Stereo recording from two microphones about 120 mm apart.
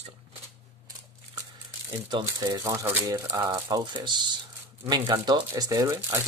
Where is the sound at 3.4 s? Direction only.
35° right (ahead or behind).